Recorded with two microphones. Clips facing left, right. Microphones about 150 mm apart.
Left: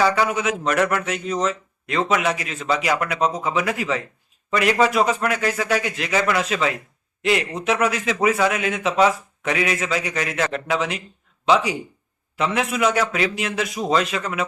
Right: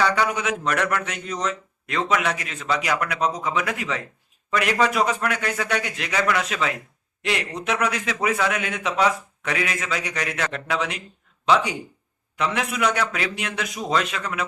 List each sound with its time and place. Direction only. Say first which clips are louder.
0.0 s speech: left 3 dB; 5° left (ahead or behind)